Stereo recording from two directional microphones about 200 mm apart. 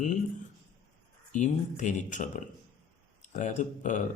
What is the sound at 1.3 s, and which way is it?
Speech, 35° left (ahead or behind).